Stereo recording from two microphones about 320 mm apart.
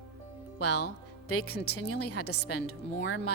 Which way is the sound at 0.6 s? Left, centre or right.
Left.